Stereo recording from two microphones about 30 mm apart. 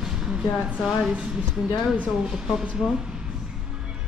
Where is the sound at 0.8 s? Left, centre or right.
Centre.